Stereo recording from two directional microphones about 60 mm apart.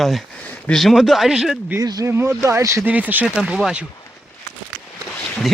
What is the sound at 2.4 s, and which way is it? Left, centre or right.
Speech, right.